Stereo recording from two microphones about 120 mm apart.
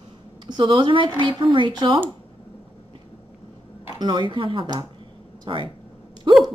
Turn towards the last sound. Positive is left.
turn(degrees=-40)  # may be behind; listen again after turning